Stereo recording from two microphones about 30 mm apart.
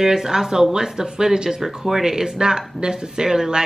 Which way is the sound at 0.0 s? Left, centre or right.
Centre.